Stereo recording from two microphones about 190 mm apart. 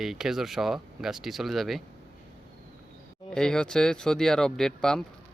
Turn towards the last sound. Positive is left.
turn(degrees=5)  # may be behind; listen again after turning